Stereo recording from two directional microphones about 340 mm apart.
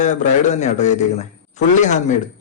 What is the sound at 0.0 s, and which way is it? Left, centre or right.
A man's voice, left.